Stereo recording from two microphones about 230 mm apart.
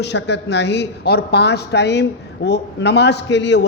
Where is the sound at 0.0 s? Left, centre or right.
Left.